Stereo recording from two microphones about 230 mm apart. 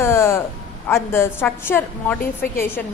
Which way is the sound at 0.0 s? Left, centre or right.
Centre.